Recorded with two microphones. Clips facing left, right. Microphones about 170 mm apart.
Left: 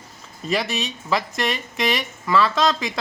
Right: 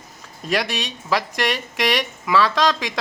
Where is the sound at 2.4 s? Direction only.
90° right.